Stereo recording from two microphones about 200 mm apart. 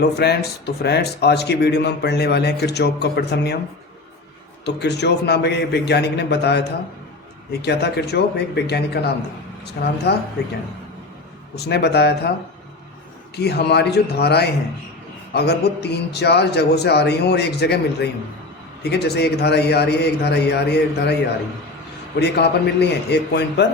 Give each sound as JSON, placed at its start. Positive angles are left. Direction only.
{"t": 0.0, "sound": "speech", "side_deg": 55}
{"t": 4.6, "sound": "speech", "side_deg": 60}
{"t": 11.5, "sound": "speech", "side_deg": 55}
{"t": 13.3, "sound": "speech", "side_deg": 55}
{"t": 22.2, "sound": "speech", "side_deg": 55}